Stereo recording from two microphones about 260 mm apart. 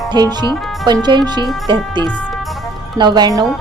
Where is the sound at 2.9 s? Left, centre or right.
Centre.